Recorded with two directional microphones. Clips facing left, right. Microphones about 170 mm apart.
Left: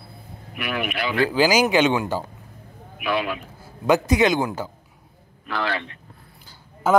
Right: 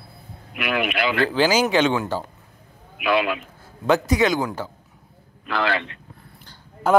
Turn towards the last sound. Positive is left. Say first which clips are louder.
# right 1 dB
turn(degrees=5)  # may be behind; listen again after turning